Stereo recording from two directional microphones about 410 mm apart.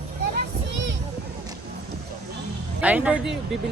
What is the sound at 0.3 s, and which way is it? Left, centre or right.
Children playing, right.